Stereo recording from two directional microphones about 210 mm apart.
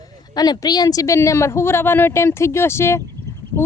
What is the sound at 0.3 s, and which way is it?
Speech, 20° left (ahead or behind).